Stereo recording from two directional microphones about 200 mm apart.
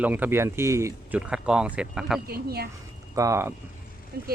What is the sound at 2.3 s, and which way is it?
Speech, 50° right (ahead or behind).